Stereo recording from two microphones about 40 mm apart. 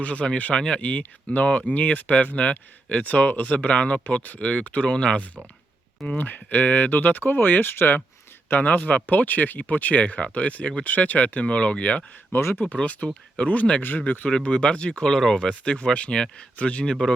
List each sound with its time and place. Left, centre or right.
0.0 s speech: left
6.1 s speech: left
8.6 s speech: left
12.3 s speech: left
12.6 s speech: left; by 15.4 s centre
15.4 s speech: left
16.8 s speech: centre